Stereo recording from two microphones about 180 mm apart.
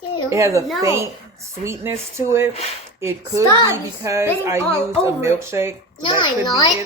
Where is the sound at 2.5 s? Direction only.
35° left (ahead or behind).